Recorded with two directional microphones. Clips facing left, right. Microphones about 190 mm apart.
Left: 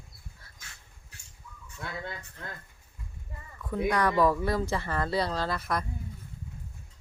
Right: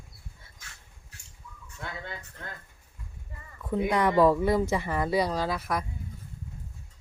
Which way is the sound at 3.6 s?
20° right (ahead or behind).